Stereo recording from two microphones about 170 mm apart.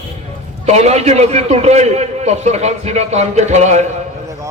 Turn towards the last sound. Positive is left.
turn(degrees=-40)  # may be behind; listen again after turning